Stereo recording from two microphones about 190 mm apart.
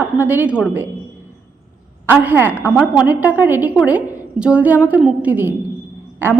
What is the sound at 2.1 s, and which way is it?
A woman's voice, 10° right (ahead or behind).